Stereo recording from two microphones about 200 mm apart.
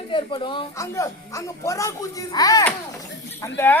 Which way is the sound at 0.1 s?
25° left (ahead or behind).